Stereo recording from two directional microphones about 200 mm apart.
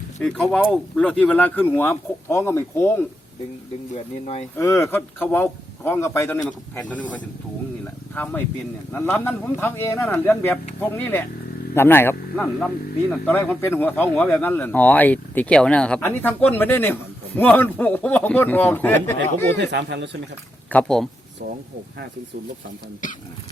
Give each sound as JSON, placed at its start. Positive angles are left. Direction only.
{"t": 0.2, "sound": "speech", "side_deg": 5}
{"t": 3.9, "sound": "speech", "side_deg": 30}
{"t": 4.5, "sound": "speech", "side_deg": 15}
{"t": 19.5, "sound": "speech", "side_deg": -60}
{"t": 20.7, "sound": "speech", "side_deg": 5}
{"t": 23.0, "sound": "speech", "side_deg": 40}